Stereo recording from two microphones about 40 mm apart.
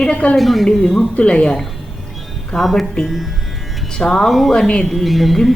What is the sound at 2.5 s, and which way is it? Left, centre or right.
Speech, centre.